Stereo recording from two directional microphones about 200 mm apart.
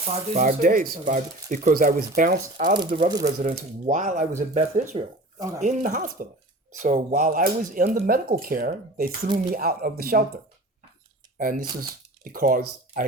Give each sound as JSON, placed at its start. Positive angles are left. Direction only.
{"t": 0.0, "sound": "speech", "side_deg": -35}
{"t": 2.7, "sound": "speech", "side_deg": -20}
{"t": 3.5, "sound": "speech", "side_deg": -35}
{"t": 11.3, "sound": "speech", "side_deg": -40}